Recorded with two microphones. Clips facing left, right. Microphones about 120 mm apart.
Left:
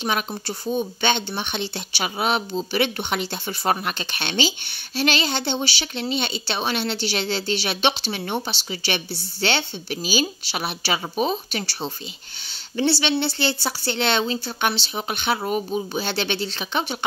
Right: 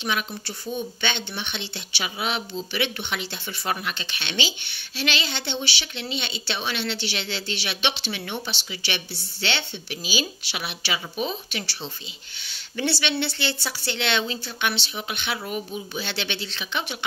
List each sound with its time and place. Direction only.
0.0 s speech: 40° left (ahead or behind)
12.7 s speech: 30° left (ahead or behind)